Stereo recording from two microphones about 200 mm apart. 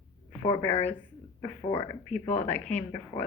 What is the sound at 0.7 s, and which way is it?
Speech, 30° left (ahead or behind).